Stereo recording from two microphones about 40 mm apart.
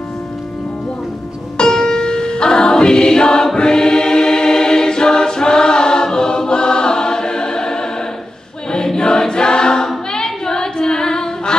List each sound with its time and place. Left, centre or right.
1.6 s music: centre
3.5 s choir: centre
10.1 s child singing: centre